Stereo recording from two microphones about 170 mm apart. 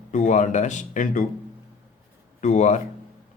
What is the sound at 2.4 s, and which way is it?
Speech, 45° left (ahead or behind).